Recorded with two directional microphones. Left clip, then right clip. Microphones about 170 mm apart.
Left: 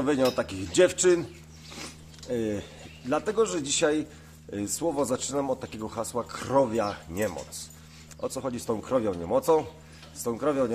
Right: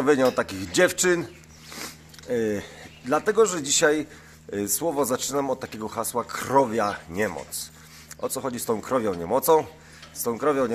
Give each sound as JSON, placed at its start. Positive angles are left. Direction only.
{"t": 0.0, "sound": "a man's voice", "side_deg": -40}